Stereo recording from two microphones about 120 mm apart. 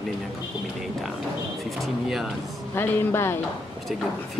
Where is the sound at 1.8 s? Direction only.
Centre (ahead or behind).